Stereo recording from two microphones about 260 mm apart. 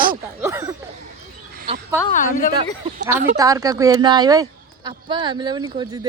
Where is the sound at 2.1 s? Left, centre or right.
Left.